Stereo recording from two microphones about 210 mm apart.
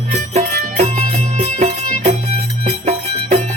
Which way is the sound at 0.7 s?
30° right (ahead or behind).